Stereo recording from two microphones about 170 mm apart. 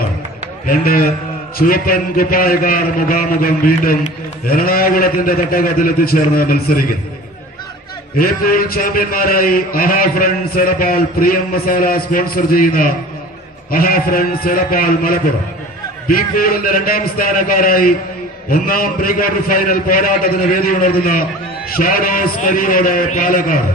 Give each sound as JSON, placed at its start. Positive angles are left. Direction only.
{"t": 0.7, "sound": "a man's voice", "side_deg": 60}
{"t": 8.2, "sound": "a man's voice", "side_deg": 60}